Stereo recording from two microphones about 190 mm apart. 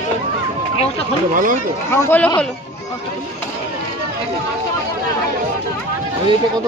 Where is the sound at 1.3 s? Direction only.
45° right (ahead or behind).